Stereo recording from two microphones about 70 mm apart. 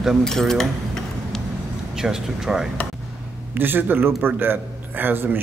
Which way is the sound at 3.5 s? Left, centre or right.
Right.